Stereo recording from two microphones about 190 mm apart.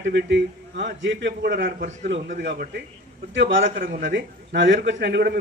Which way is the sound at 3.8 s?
50° right (ahead or behind).